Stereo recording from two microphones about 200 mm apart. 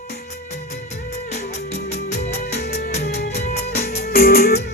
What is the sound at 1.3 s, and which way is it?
Music, 35° left (ahead or behind).